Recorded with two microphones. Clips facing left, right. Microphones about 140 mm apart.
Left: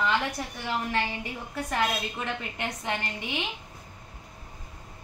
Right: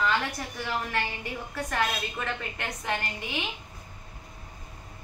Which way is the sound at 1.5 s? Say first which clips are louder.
Left 1 dB; 20° left (ahead or behind).